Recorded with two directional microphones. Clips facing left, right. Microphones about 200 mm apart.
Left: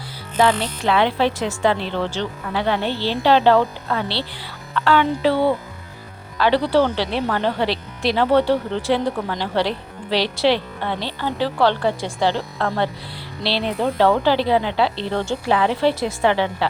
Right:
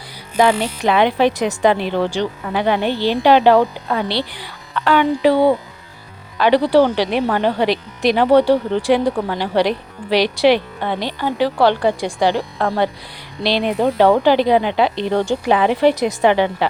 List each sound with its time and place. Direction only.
0.3 s speech: 10° right (ahead or behind)